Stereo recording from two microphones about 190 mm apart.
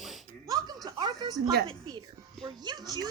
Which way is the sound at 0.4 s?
20° right (ahead or behind).